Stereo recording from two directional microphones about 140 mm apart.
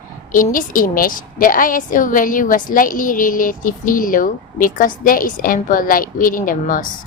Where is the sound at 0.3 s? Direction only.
75° left (ahead or behind).